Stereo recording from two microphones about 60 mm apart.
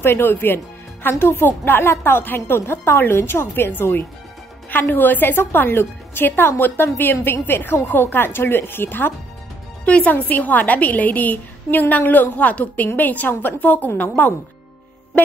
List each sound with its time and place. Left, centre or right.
0.0 s a woman's voice: left
9.8 s a woman's voice: left